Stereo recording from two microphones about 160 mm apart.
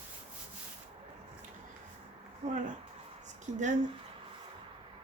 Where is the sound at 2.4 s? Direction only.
45° right (ahead or behind).